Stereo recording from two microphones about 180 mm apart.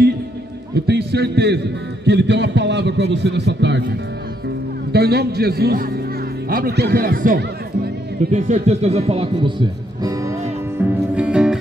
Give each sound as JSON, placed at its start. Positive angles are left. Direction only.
{"t": 0.7, "sound": "a man's voice", "side_deg": -65}
{"t": 4.9, "sound": "a man's voice", "side_deg": -65}
{"t": 8.3, "sound": "speech", "side_deg": -40}
{"t": 10.8, "sound": "music", "side_deg": -10}